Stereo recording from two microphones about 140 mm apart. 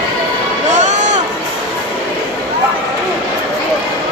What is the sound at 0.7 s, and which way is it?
Music, 60° right (ahead or behind).